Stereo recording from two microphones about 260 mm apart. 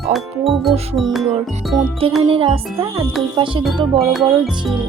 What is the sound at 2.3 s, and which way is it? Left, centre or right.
Speech, centre.